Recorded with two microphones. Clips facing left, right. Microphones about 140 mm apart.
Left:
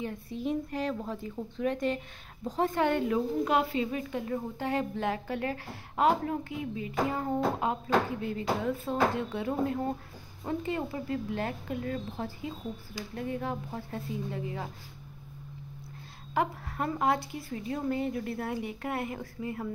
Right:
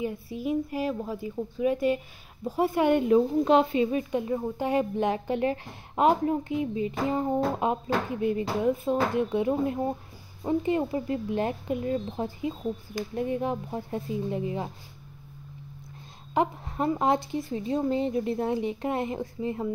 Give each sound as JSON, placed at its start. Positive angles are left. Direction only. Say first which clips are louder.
{"t": 0.0, "sound": "a woman's voice", "louder": "right 3 dB", "side_deg": -10}
{"t": 16.3, "sound": "speech", "louder": "right 4 dB", "side_deg": -20}